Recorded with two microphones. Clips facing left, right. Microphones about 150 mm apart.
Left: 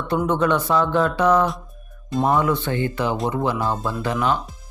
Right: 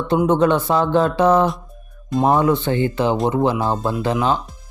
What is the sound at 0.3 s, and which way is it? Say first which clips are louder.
Speech: right 3 dB; 30° right (ahead or behind).